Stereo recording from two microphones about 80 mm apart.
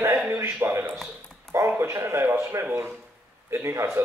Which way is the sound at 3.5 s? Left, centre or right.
Right.